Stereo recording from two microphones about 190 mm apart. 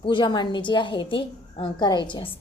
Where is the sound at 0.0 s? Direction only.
25° left (ahead or behind).